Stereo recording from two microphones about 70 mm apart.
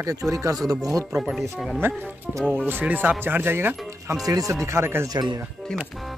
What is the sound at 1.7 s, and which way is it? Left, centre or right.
Speech, right.